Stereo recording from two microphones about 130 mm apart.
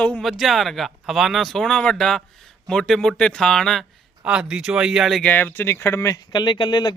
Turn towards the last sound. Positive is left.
turn(degrees=35)  # may be behind; listen again after turning